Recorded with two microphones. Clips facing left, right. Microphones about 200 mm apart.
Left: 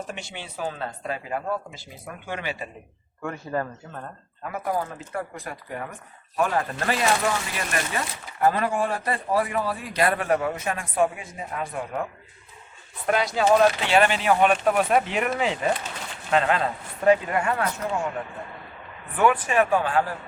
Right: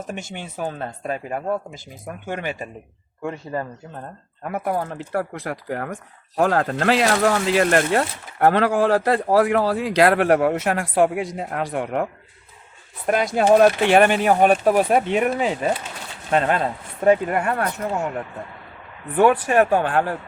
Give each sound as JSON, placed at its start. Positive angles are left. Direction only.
{"t": 0.1, "sound": "speech", "side_deg": -45}
{"t": 3.2, "sound": "speech", "side_deg": -20}
{"t": 4.4, "sound": "speech", "side_deg": -60}
{"t": 13.1, "sound": "speech", "side_deg": -50}
{"t": 19.1, "sound": "speech", "side_deg": -35}
{"t": 19.5, "sound": "speech", "side_deg": -50}